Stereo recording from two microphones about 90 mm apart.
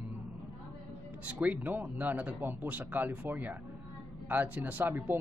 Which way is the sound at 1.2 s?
15° right (ahead or behind).